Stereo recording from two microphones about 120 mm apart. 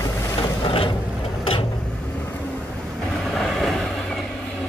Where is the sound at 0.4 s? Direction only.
50° left (ahead or behind).